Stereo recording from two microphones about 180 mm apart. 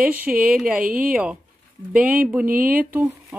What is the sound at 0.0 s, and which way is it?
Speech, 10° right (ahead or behind).